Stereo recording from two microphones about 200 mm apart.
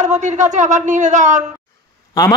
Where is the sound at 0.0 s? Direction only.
35° right (ahead or behind).